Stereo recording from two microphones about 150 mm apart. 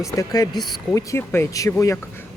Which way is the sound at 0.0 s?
20° left (ahead or behind).